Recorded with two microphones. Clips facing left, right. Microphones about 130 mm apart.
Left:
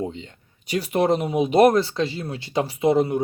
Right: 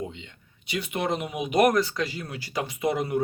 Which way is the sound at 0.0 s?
35° left (ahead or behind).